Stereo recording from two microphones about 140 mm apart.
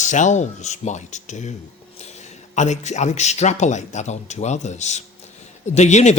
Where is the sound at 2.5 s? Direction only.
55° left (ahead or behind).